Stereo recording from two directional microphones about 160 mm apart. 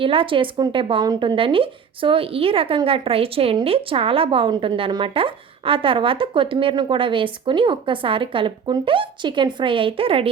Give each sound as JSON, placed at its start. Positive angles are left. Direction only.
{"t": 0.0, "sound": "a woman's voice", "side_deg": -35}